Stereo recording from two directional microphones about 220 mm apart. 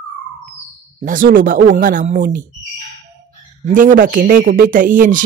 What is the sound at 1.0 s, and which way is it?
A man's voice, 40° right (ahead or behind).